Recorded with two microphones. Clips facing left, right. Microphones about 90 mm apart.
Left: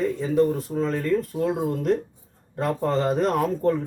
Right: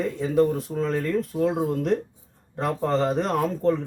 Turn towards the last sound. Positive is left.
turn(degrees=5)  # may be behind; listen again after turning